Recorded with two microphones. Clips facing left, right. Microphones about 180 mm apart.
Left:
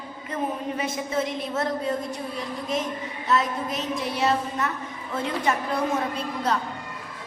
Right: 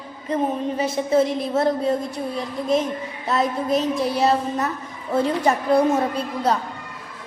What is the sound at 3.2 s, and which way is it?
A woman's voice, 35° right (ahead or behind).